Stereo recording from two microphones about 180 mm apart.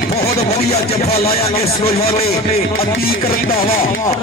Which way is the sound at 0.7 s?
35° left (ahead or behind).